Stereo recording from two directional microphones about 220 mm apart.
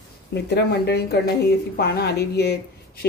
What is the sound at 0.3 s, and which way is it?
A woman's voice, 50° left (ahead or behind).